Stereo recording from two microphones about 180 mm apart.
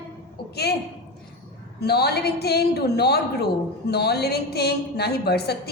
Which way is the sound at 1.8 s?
65° left (ahead or behind).